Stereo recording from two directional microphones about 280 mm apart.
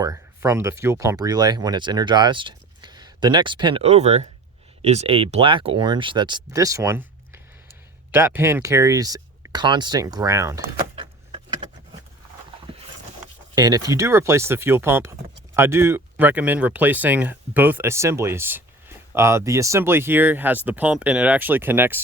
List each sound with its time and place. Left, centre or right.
0.0 s speech: centre
10.9 s vehicle: centre
13.6 s speech: centre